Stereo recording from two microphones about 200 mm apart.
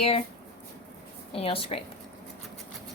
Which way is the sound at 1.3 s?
30° left (ahead or behind).